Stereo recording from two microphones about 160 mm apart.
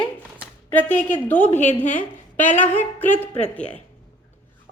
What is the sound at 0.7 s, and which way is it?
A woman's voice, 10° left (ahead or behind).